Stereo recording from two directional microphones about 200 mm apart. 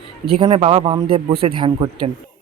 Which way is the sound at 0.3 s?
25° right (ahead or behind).